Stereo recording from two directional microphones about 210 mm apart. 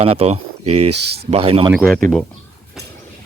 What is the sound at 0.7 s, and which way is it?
Speech, 90° right.